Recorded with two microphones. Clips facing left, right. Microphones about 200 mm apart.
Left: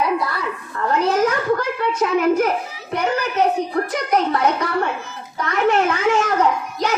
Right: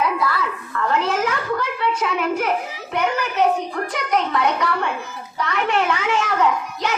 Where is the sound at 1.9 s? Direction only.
40° left (ahead or behind).